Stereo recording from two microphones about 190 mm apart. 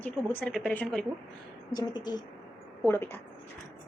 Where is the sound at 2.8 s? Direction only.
10° left (ahead or behind).